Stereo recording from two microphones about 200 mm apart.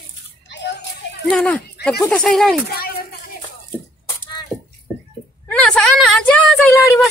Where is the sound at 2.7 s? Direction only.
50° left (ahead or behind).